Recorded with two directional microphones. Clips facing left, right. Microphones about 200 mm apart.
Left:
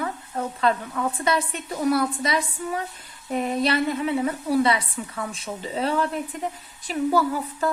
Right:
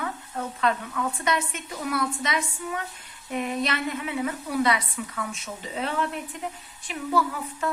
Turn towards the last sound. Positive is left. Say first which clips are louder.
# left 5 dB
turn(degrees=35)  # may be behind; listen again after turning